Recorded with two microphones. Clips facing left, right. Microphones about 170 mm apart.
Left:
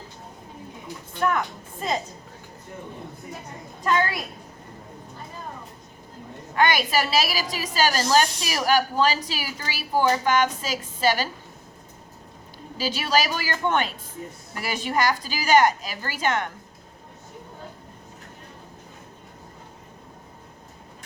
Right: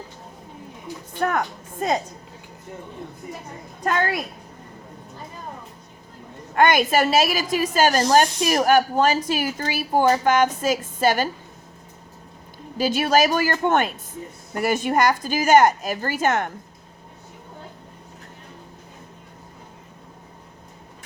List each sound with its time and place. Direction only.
3.8 s speech: 50° right (ahead or behind)
6.6 s speech: 50° right (ahead or behind)
12.7 s speech: 50° right (ahead or behind)